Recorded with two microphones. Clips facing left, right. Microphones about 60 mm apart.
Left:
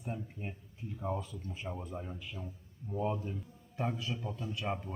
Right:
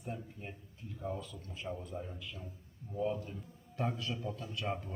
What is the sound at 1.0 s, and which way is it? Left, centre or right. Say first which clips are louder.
Speech: left 3 dB; left.